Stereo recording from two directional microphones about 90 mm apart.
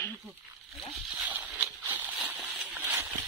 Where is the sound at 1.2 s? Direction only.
15° right (ahead or behind).